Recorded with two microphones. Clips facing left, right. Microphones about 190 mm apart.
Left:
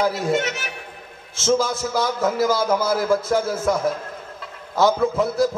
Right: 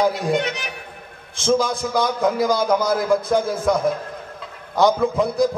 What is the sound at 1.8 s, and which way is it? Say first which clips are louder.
Speech: right 2 dB; 5° left (ahead or behind).